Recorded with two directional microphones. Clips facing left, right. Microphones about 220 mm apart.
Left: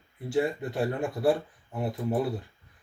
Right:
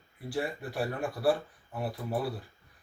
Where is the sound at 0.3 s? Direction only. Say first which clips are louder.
Left 7 dB; 20° left (ahead or behind).